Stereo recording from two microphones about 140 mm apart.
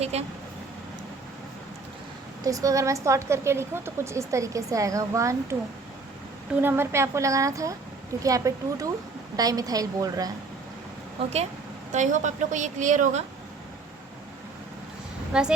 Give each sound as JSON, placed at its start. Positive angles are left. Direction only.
{"t": 0.0, "sound": "speech", "side_deg": -50}
{"t": 2.4, "sound": "a woman's voice", "side_deg": -25}
{"t": 6.6, "sound": "a woman's voice", "side_deg": -15}
{"t": 11.9, "sound": "a woman's voice", "side_deg": -60}
{"t": 15.3, "sound": "speech", "side_deg": -5}